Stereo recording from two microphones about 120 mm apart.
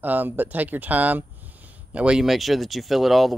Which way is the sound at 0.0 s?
15° right (ahead or behind).